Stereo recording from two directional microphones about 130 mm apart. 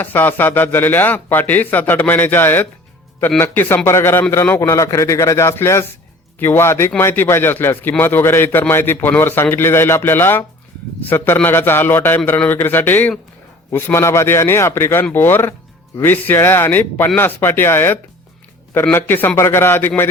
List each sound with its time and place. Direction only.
0.0 s a man's voice: 15° left (ahead or behind)